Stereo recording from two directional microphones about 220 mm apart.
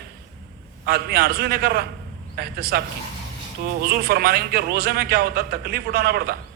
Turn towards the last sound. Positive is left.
turn(degrees=-45)  # may be behind; listen again after turning